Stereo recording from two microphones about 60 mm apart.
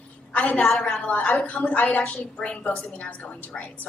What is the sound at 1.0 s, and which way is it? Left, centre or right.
A woman's voice, left.